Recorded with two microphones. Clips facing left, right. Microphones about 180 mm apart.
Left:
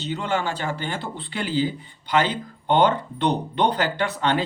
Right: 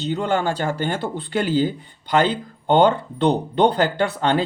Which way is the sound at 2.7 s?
30° right (ahead or behind).